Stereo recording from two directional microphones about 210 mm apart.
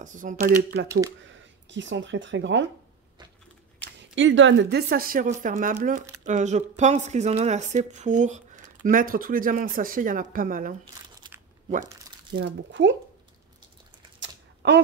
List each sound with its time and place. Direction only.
0.0 s speech: 40° right (ahead or behind)
1.2 s speech: 60° right (ahead or behind)
3.8 s speech: 60° right (ahead or behind); by 10.8 s 40° right (ahead or behind)
12.4 s speech: 60° right (ahead or behind)
14.2 s typing: 55° right (ahead or behind)